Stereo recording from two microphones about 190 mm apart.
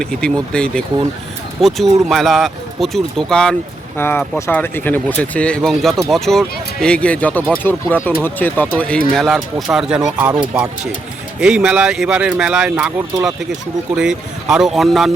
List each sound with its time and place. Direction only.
0.0 s speech: 5° left (ahead or behind)